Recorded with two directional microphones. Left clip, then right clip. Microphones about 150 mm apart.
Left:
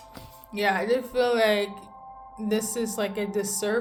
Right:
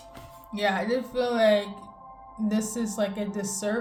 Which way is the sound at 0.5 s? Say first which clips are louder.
Left 2 dB; 35° left (ahead or behind).